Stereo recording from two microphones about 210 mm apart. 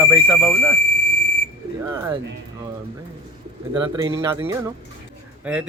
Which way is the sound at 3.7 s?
20° right (ahead or behind).